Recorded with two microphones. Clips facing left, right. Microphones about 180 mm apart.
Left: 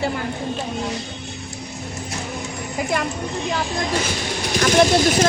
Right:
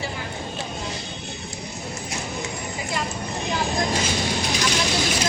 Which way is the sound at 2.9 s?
60° left (ahead or behind).